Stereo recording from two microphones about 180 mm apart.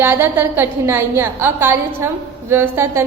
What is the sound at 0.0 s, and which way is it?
A woman's voice, 10° right (ahead or behind).